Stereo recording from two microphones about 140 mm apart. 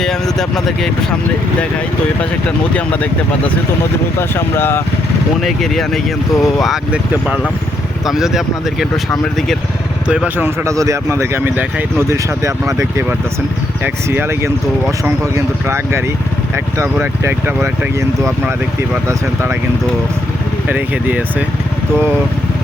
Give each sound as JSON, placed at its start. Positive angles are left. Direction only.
{"t": 0.0, "sound": "speech", "side_deg": 5}
{"t": 2.7, "sound": "speech", "side_deg": 10}
{"t": 5.4, "sound": "speech", "side_deg": 0}
{"t": 10.1, "sound": "speech", "side_deg": -10}
{"t": 10.7, "sound": "speech", "side_deg": -20}
{"t": 20.7, "sound": "speech", "side_deg": -10}